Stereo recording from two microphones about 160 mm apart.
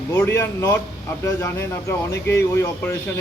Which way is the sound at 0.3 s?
15° left (ahead or behind).